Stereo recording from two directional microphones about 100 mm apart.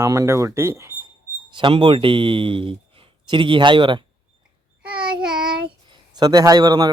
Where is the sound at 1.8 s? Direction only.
60° right (ahead or behind).